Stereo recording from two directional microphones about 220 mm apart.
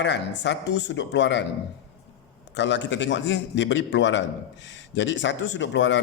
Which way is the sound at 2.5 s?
55° left (ahead or behind).